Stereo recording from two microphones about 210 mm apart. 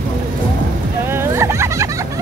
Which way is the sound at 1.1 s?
10° right (ahead or behind).